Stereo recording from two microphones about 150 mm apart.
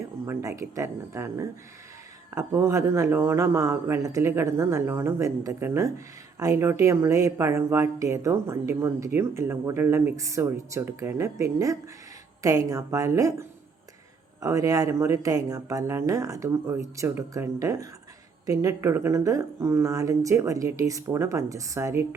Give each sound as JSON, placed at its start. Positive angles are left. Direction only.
{"t": 0.3, "sound": "speech", "side_deg": -20}
{"t": 14.4, "sound": "speech", "side_deg": -20}